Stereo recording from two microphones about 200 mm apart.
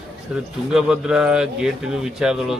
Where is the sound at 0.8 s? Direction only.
5° right (ahead or behind).